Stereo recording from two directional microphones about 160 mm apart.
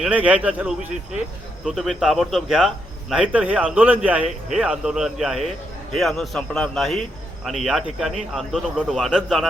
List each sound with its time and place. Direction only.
0.0 s speech: 10° right (ahead or behind)